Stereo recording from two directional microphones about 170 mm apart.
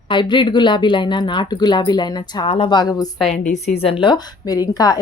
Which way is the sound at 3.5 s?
40° left (ahead or behind).